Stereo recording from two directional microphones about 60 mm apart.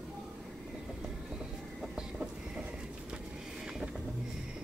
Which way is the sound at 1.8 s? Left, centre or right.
Centre.